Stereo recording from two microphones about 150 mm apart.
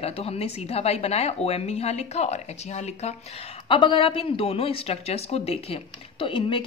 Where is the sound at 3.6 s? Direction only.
35° left (ahead or behind).